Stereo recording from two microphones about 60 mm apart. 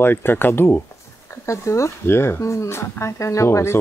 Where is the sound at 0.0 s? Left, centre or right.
Left.